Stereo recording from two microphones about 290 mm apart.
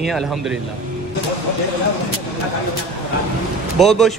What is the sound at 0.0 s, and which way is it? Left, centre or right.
Speech, centre.